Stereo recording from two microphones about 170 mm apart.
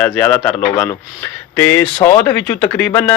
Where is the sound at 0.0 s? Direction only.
10° left (ahead or behind).